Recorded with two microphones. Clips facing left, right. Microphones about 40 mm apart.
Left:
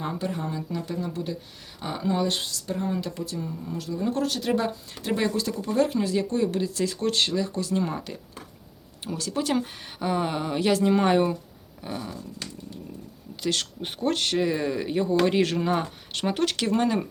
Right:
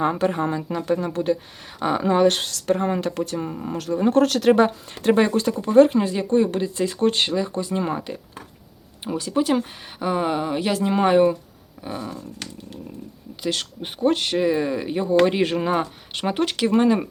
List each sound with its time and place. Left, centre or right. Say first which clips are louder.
0.0 s speech: right 9 dB; right
5.0 s speech: right 8 dB; right; by 12.1 s centre
12.4 s speech: right 2 dB; right
13.4 s speech: right 2 dB; centre